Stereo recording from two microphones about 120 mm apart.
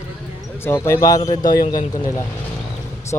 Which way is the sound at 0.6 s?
25° left (ahead or behind).